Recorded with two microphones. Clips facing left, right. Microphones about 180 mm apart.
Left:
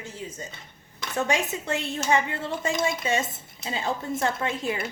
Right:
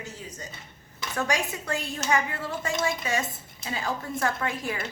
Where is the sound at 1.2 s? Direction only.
25° left (ahead or behind).